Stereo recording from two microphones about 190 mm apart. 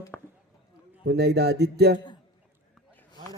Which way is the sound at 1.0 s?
60° right (ahead or behind).